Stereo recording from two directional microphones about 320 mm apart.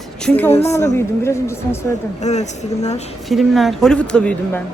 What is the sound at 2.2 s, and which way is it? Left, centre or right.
Speech, left.